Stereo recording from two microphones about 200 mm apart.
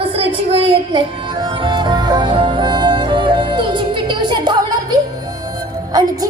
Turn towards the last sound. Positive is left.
turn(degrees=-20)  # may be behind; listen again after turning